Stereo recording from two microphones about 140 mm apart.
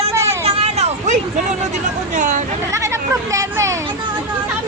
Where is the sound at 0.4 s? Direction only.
50° right (ahead or behind).